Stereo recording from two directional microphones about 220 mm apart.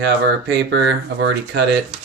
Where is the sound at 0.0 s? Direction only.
50° right (ahead or behind).